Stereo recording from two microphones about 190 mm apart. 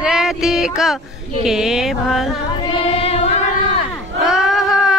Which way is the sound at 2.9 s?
30° left (ahead or behind).